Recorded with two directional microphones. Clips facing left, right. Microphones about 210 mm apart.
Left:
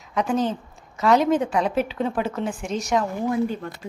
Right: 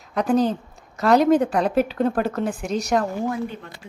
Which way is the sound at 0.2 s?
35° right (ahead or behind).